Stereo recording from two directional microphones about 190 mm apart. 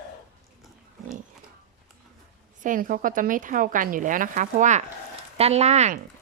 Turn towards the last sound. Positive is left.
turn(degrees=-35)  # may be behind; listen again after turning